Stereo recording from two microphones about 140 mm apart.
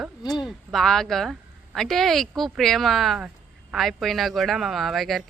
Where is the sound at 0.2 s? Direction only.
30° left (ahead or behind).